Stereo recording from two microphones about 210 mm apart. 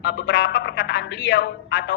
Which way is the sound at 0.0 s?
55° left (ahead or behind).